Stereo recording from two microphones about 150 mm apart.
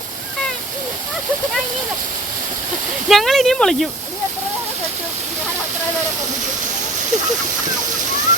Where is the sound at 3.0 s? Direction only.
Centre (ahead or behind).